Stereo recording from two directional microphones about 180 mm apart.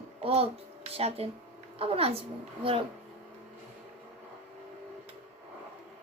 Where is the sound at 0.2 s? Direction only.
35° right (ahead or behind).